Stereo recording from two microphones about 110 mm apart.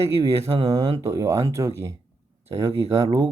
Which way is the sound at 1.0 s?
30° right (ahead or behind).